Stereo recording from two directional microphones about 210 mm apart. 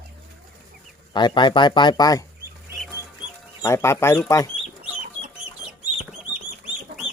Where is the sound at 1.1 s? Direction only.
20° left (ahead or behind).